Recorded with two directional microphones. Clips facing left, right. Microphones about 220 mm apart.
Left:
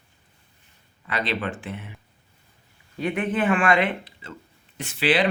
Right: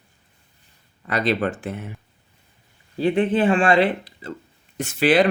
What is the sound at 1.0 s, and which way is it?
Speech, 40° right (ahead or behind).